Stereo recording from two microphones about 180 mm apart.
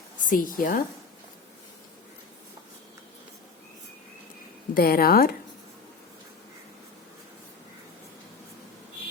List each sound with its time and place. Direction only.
0.3 s a woman's voice: 50° left (ahead or behind)
4.7 s speech: 55° left (ahead or behind)